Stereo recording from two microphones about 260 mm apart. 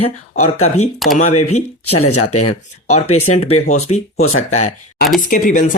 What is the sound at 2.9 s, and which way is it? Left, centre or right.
Speech, left.